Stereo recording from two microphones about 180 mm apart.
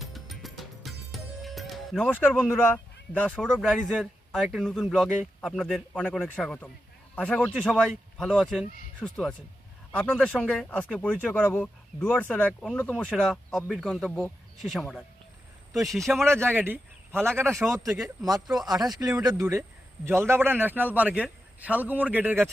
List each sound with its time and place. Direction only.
0.0 s music: centre (ahead or behind)
4.3 s speech: centre (ahead or behind)
16.2 s a man's voice: 15° right (ahead or behind)
17.9 s speech: centre (ahead or behind)
18.9 s a man's voice: 20° right (ahead or behind)